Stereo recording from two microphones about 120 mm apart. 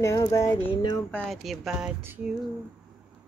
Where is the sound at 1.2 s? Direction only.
Centre (ahead or behind).